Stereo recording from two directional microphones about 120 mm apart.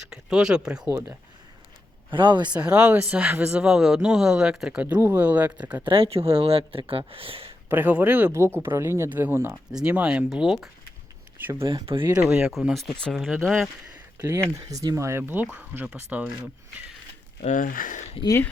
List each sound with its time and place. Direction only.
0.0 s speech: 5° right (ahead or behind)
0.9 s speech: 25° right (ahead or behind)
2.1 s speech: 40° right (ahead or behind)
2.6 s speech: 10° right (ahead or behind)
5.8 s speech: 50° right (ahead or behind)
7.7 s speech: 15° right (ahead or behind)
11.3 s speech: 15° right (ahead or behind)
11.7 s speech: 45° right (ahead or behind)
12.5 s speech: centre (ahead or behind)
14.2 s speech: 20° right (ahead or behind)
17.4 s speech: 90° left